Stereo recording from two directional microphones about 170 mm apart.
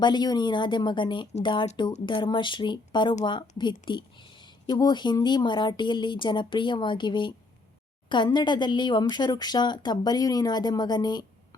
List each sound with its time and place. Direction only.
0.0 s a woman's voice: 25° left (ahead or behind)